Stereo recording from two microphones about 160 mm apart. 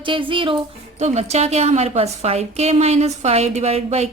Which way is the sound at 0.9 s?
45° right (ahead or behind).